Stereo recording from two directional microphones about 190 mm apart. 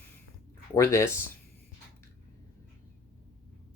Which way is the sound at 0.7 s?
15° left (ahead or behind).